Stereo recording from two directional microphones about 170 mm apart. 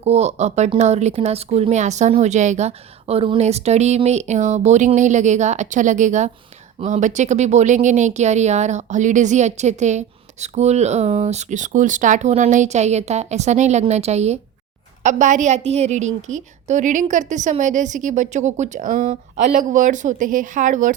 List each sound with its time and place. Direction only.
0.0 s a woman's voice: 40° right (ahead or behind)